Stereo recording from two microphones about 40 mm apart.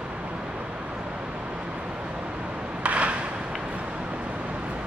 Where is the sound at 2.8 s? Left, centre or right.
Right.